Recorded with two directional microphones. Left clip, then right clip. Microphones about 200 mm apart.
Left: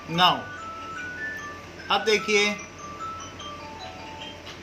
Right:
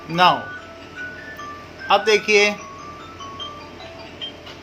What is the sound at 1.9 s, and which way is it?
Speech, 40° right (ahead or behind).